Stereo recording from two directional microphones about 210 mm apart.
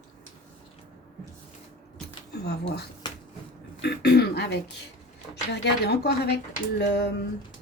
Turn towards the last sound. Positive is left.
turn(degrees=50)  # may be behind; listen again after turning